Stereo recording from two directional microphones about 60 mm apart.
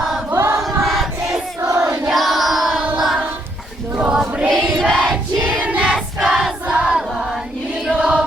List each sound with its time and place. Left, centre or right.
0.6 s choir: centre
1.3 s crowd: right
2.0 s music: centre
4.1 s choir: centre
4.8 s crowd: centre
5.4 s choir: right
6.1 s choir: centre
6.7 s crowd: centre
7.9 s chant: centre